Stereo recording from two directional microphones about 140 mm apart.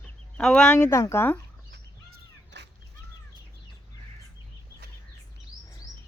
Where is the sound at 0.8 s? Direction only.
20° left (ahead or behind).